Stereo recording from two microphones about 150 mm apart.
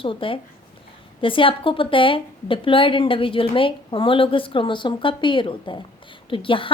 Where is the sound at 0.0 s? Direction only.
35° left (ahead or behind).